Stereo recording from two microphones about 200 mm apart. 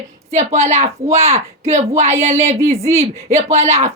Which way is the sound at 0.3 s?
35° right (ahead or behind).